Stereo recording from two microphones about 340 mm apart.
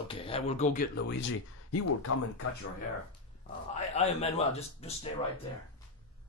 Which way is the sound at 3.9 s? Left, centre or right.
Centre.